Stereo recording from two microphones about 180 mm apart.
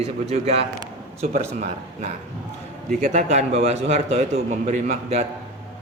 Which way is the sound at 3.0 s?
40° right (ahead or behind).